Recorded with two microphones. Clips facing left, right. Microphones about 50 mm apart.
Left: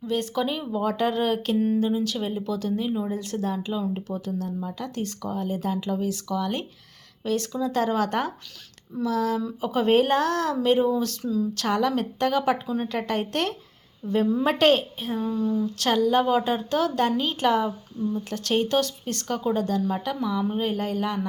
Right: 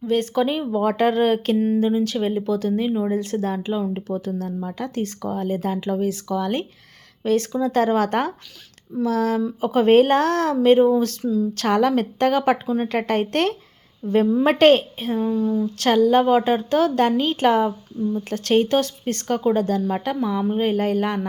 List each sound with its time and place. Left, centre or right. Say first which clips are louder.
0.1 s speech: right 6 dB; right
1.5 s speech: right 3 dB; centre
1.8 s speech: right 5 dB; right
11.2 s speech: right 4 dB; centre
11.5 s a woman's voice: right 7 dB; right
12.6 s a woman's voice: right 5 dB; right
12.9 s a woman's voice: right 5 dB; right
15.4 s a woman's voice: right 3 dB; centre
15.6 s speech: right 7 dB; right